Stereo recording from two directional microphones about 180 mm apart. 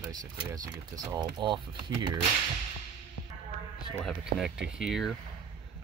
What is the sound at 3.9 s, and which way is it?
Speech, centre (ahead or behind).